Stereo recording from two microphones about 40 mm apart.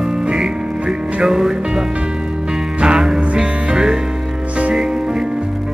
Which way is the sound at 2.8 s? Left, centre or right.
Centre.